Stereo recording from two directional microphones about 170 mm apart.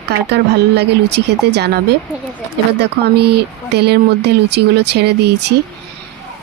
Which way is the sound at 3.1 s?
75° right (ahead or behind).